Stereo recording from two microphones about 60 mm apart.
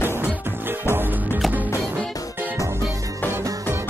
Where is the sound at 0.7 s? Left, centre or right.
Right.